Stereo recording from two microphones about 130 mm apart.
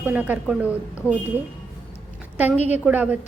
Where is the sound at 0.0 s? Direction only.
15° right (ahead or behind).